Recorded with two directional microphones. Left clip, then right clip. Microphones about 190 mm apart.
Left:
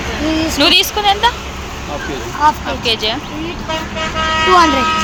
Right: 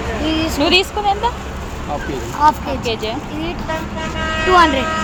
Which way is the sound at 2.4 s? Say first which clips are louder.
Left 1 dB; 45° right (ahead or behind).